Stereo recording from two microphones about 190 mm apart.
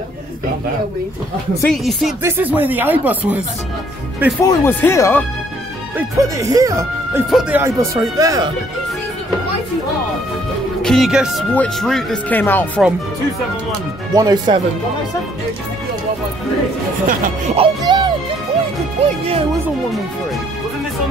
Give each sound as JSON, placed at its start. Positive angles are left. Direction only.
{"t": 1.6, "sound": "speech", "side_deg": 0}
{"t": 2.2, "sound": "speech", "side_deg": -10}
{"t": 4.5, "sound": "speech", "side_deg": 15}
{"t": 5.9, "sound": "speech", "side_deg": -15}
{"t": 7.2, "sound": "speech", "side_deg": -5}
{"t": 10.8, "sound": "speech", "side_deg": 0}
{"t": 14.1, "sound": "music", "side_deg": -20}
{"t": 17.0, "sound": "speech", "side_deg": -45}
{"t": 17.6, "sound": "music", "side_deg": -25}
{"t": 19.0, "sound": "speech", "side_deg": -30}